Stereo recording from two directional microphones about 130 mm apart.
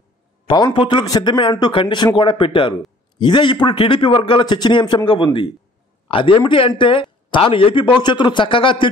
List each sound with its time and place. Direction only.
0.7 s a man's voice: 35° left (ahead or behind)